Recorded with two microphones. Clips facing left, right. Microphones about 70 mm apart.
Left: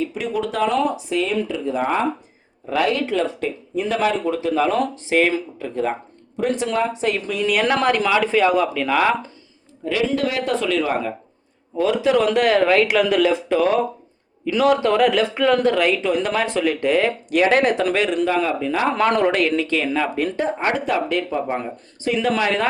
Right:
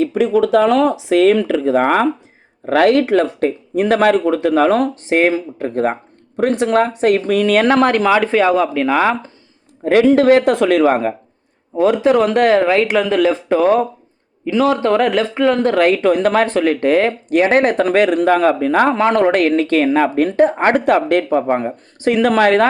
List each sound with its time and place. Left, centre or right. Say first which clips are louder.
0.6 s speech: right 6 dB; right
2.6 s speech: right 8 dB; right
3.0 s speech: right 7 dB; right
9.8 s speech: right 10 dB; right
12.5 s a man's voice: right 3 dB; right
13.3 s a man's voice: right 4 dB; right
15.6 s speech: right 5 dB; right
22.0 s speech: right 7 dB; right